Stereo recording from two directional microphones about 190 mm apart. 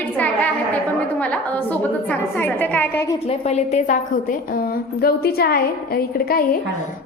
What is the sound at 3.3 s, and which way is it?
A woman's voice, 35° left (ahead or behind).